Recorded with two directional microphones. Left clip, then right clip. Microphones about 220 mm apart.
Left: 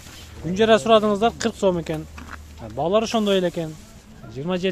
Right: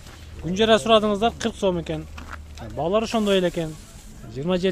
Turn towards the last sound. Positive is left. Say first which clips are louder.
# right 1 dB
turn(degrees=0)  # may be behind; listen again after turning